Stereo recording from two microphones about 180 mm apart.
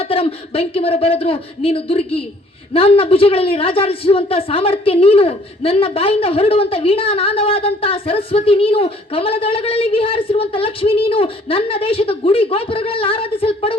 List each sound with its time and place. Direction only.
0.0 s a man's voice: 30° left (ahead or behind)